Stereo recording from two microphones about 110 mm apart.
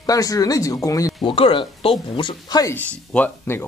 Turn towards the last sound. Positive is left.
turn(degrees=20)  # may be behind; listen again after turning